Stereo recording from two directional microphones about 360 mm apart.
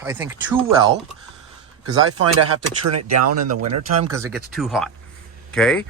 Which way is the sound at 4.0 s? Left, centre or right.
Centre.